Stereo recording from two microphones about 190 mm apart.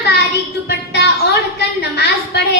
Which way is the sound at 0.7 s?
60° left (ahead or behind).